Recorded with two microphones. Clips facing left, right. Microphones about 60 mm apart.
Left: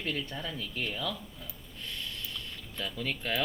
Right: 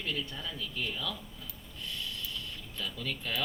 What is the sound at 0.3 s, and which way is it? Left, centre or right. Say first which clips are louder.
Speech: left 2 dB; left.